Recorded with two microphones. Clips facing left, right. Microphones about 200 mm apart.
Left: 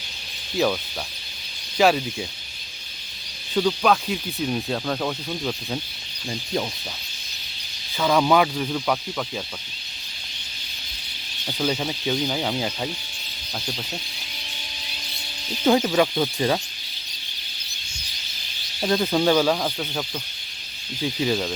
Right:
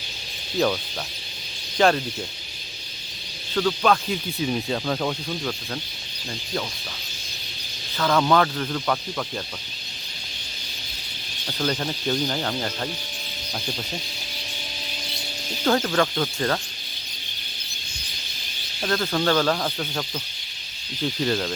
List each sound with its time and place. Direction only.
1.8 s speech: 5° left (ahead or behind)
3.5 s speech: 15° left (ahead or behind)
3.8 s speech: centre (ahead or behind)
7.9 s speech: 10° left (ahead or behind)
11.4 s speech: 10° left (ahead or behind)
15.6 s speech: 15° left (ahead or behind)
18.8 s speech: 15° left (ahead or behind)